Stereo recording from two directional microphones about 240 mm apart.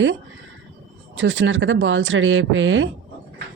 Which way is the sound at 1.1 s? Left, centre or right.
Right.